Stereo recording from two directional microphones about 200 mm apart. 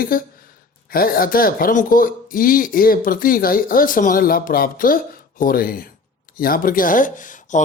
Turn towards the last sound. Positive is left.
turn(degrees=40)  # may be behind; listen again after turning